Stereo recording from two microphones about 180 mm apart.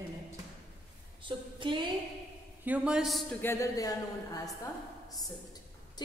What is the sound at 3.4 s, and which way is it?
A woman's voice, 15° left (ahead or behind).